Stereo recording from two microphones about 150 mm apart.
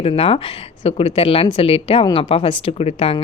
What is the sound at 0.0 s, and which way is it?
Speech, 40° left (ahead or behind).